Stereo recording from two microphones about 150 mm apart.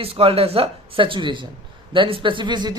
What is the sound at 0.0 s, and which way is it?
Mantra, 40° right (ahead or behind).